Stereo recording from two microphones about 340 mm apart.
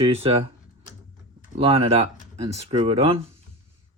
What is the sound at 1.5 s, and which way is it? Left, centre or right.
Speech, centre.